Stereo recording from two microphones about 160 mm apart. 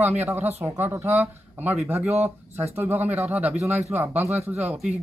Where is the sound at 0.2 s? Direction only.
15° right (ahead or behind).